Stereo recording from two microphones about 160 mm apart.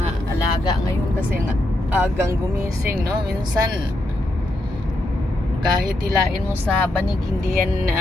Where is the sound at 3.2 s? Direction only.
25° right (ahead or behind).